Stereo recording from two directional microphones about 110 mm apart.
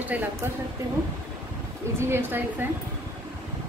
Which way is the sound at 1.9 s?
25° right (ahead or behind).